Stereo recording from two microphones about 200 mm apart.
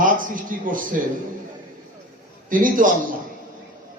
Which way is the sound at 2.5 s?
45° right (ahead or behind).